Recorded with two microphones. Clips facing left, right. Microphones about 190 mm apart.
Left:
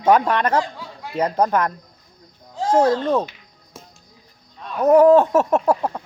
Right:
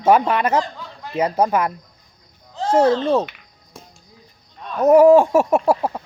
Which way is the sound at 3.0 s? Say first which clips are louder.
Right 2 dB; 10° right (ahead or behind).